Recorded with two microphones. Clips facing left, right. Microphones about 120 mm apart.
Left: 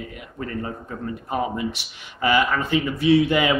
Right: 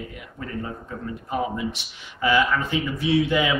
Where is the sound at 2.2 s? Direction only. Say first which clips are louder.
Left 1 dB; 60° left (ahead or behind).